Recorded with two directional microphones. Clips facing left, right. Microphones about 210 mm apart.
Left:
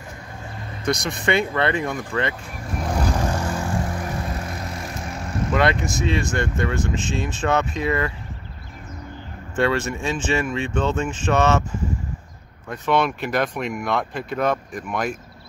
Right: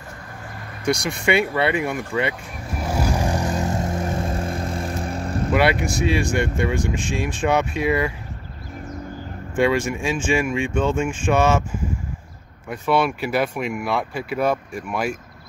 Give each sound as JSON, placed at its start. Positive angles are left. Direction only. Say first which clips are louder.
{"t": 1.0, "sound": "vehicle", "louder": "right 1 dB", "side_deg": -10}
{"t": 5.5, "sound": "speech", "louder": "right 1 dB", "side_deg": -10}
{"t": 9.6, "sound": "speech", "louder": "right 2 dB", "side_deg": -10}
{"t": 12.6, "sound": "speech", "louder": "right 1 dB", "side_deg": -10}